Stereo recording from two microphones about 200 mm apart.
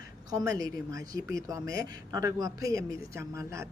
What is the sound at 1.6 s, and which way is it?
Speech, 45° left (ahead or behind).